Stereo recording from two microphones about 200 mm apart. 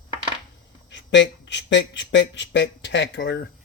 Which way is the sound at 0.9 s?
65° left (ahead or behind).